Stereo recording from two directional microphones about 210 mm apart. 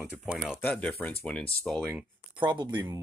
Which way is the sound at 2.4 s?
20° right (ahead or behind).